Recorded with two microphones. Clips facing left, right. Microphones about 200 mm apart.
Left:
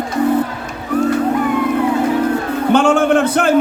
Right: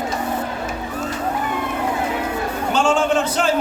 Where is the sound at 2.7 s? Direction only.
60° left (ahead or behind).